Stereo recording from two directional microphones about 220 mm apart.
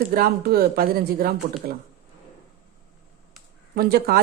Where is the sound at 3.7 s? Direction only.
45° right (ahead or behind).